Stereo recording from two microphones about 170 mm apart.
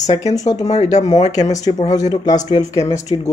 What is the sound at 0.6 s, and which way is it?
Speech, 40° left (ahead or behind).